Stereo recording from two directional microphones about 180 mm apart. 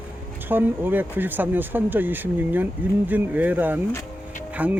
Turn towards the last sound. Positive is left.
turn(degrees=-10)  # may be behind; listen again after turning